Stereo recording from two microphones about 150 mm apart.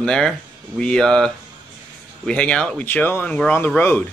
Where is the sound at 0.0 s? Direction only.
5° left (ahead or behind).